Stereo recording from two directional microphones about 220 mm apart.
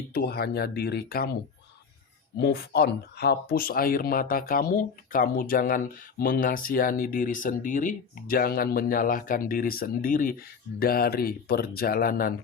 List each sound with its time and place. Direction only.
0.1 s speech: 45° left (ahead or behind)
2.4 s speech: 45° left (ahead or behind)